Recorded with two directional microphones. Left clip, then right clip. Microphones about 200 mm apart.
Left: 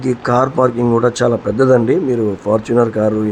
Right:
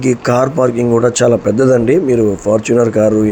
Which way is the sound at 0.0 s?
5° right (ahead or behind).